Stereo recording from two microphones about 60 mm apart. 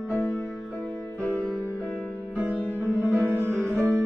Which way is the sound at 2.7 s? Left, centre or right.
Left.